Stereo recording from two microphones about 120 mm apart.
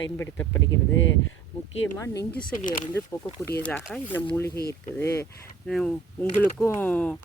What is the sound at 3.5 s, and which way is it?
Speech, 10° left (ahead or behind).